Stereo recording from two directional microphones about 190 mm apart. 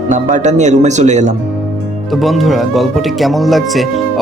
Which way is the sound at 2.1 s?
Centre (ahead or behind).